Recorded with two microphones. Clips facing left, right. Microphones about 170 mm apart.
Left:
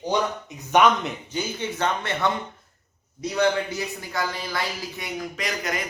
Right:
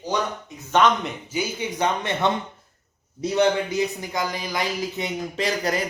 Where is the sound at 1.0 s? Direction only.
10° right (ahead or behind).